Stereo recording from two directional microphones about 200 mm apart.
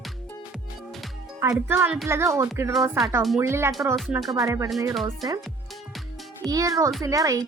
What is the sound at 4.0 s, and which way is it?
Speech, centre (ahead or behind).